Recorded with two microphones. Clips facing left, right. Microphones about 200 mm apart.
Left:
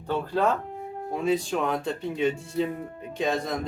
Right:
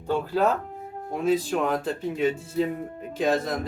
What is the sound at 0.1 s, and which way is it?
Speech, 5° right (ahead or behind).